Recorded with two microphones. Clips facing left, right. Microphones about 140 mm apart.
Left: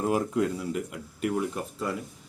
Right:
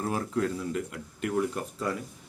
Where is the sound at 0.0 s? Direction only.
15° left (ahead or behind).